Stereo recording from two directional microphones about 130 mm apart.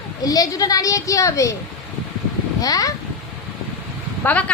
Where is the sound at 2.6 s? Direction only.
30° left (ahead or behind).